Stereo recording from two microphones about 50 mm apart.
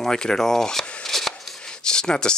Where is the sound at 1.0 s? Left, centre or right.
Centre.